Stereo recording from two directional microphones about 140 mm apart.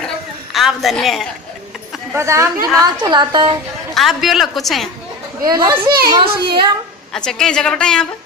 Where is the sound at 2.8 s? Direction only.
30° right (ahead or behind).